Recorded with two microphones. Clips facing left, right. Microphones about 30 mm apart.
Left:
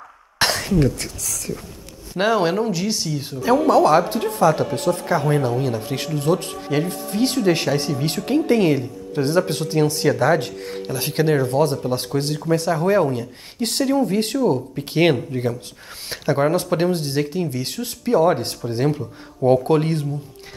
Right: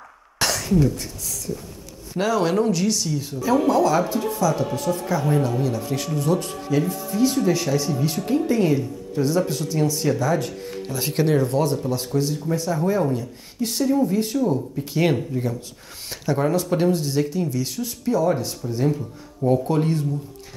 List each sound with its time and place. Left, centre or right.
0.4 s cough: left
0.7 s a woman's voice: left
2.1 s speech: left
2.5 s speech: centre
2.9 s speech: left
11.0 s speech: left
11.8 s speech: left
12.3 s speech: left
14.8 s speech: left
16.1 s speech: left